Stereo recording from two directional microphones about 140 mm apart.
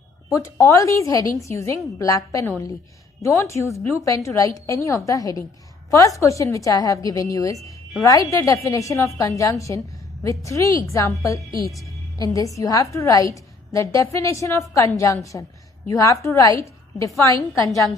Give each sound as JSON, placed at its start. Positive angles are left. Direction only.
{"t": 0.3, "sound": "a woman's voice", "side_deg": 20}